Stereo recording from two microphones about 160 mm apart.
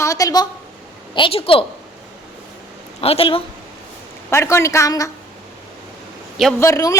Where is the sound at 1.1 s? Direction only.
35° left (ahead or behind).